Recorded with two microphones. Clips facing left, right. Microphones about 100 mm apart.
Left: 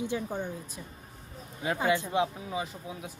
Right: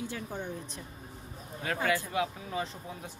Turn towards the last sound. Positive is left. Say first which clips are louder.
# left 1 dB
turn(degrees=10)  # may be behind; listen again after turning